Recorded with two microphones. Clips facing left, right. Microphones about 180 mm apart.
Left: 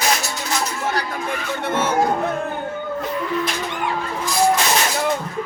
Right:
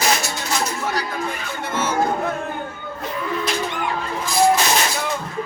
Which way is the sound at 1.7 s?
60° left (ahead or behind).